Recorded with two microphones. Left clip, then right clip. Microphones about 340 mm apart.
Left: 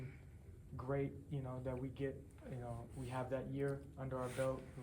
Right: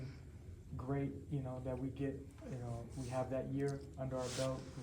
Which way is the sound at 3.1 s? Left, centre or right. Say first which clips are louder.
Right 3 dB; centre.